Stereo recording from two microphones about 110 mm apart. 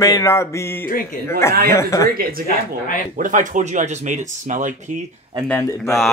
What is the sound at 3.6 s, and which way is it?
Speech, 90° right.